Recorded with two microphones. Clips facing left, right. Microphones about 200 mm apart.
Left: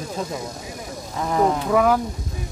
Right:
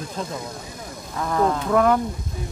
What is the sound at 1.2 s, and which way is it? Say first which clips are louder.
Livestock: left 1 dB; 15° left (ahead or behind).